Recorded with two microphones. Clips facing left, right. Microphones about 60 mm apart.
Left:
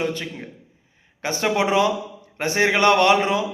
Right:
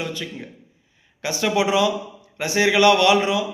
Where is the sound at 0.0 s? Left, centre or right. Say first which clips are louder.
Left 3 dB; left.